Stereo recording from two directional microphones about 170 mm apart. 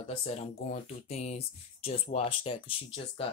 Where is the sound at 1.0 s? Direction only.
40° left (ahead or behind).